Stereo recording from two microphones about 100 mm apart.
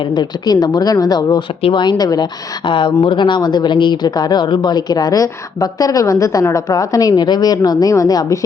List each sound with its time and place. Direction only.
0.1 s speech: 45° left (ahead or behind)
1.6 s speech: 50° left (ahead or behind)
2.6 s speech: 55° left (ahead or behind); by 8.4 s 35° left (ahead or behind)